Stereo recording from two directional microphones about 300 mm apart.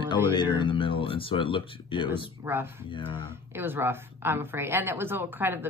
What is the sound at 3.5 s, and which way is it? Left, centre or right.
A woman's voice, centre.